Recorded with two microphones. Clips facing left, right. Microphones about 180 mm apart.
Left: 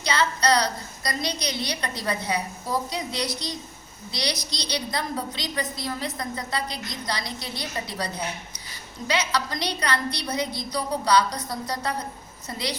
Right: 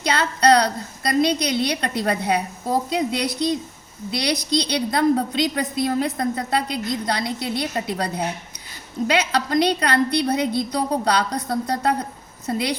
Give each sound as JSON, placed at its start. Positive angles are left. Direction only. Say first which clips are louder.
{"t": 0.0, "sound": "a woman's voice", "louder": "right 5 dB", "side_deg": -55}